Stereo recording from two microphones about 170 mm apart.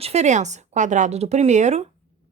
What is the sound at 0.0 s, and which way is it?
Speech, 40° right (ahead or behind).